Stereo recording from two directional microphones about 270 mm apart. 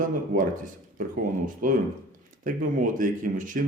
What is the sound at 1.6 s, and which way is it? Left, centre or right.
A man's voice, right.